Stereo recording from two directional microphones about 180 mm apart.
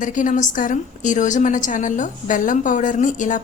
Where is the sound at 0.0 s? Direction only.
45° left (ahead or behind).